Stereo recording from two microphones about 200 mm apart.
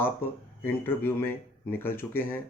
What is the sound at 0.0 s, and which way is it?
Speech, 10° left (ahead or behind).